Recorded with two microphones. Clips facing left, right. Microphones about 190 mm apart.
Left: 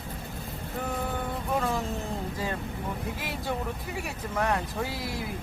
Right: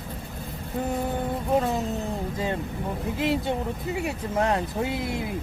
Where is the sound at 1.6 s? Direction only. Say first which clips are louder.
Right 3 dB; 20° right (ahead or behind).